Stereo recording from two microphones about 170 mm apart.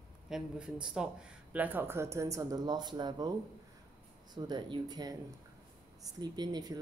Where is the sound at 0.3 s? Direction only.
5° right (ahead or behind); by 3.3 s 25° right (ahead or behind).